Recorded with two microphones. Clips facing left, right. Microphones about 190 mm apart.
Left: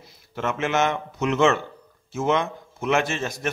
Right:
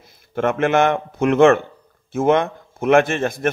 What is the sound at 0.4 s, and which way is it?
Speech, 55° right (ahead or behind).